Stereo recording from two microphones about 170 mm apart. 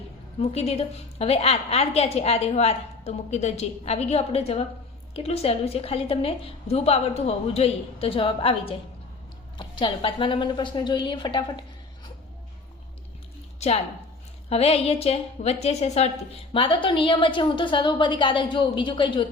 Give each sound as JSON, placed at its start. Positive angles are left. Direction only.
{"t": 0.3, "sound": "a woman's voice", "side_deg": 40}
{"t": 13.6, "sound": "a woman's voice", "side_deg": 40}